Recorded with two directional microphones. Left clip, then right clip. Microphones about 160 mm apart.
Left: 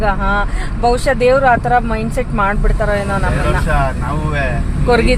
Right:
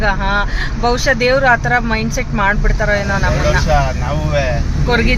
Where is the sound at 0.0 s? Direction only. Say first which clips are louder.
Even; 10° left (ahead or behind).